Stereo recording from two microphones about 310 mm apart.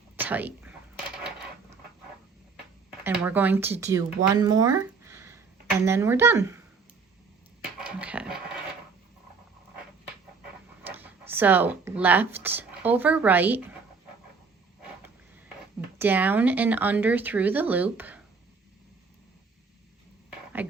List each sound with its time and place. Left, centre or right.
0.2 s speech: centre
3.0 s speech: centre
7.6 s a sound: centre
10.8 s speech: centre
16.0 s speech: centre
20.6 s speech: centre